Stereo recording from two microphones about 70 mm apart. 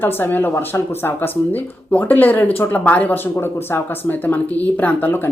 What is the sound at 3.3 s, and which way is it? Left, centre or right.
A woman's voice, left.